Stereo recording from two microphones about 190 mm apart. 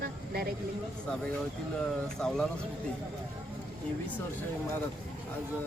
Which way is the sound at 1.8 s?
5° left (ahead or behind).